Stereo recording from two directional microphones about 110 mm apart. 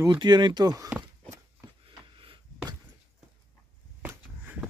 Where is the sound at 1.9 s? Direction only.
50° right (ahead or behind).